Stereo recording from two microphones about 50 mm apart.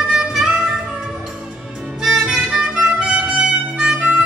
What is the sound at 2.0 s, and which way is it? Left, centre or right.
Music, centre.